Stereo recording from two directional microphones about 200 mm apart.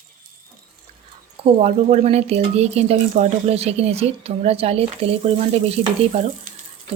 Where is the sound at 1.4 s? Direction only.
30° right (ahead or behind).